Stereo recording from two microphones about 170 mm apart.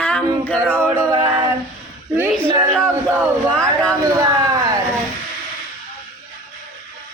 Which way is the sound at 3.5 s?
5° left (ahead or behind).